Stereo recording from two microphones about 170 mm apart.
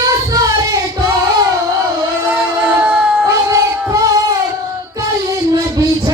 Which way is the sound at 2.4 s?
10° right (ahead or behind).